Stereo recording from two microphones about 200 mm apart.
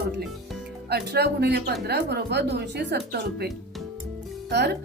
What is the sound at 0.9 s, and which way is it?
A woman's voice, 55° right (ahead or behind).